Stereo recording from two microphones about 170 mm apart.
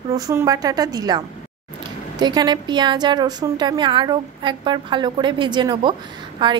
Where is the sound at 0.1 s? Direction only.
20° right (ahead or behind).